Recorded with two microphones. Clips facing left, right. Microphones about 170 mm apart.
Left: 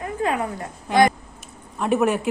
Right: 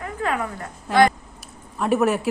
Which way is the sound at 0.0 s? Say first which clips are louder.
Left 2 dB; 20° left (ahead or behind).